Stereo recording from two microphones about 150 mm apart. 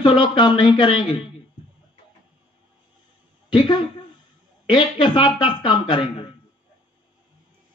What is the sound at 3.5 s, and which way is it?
A man's voice, 30° left (ahead or behind).